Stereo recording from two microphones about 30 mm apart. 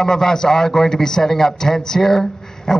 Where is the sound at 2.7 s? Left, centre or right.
Left.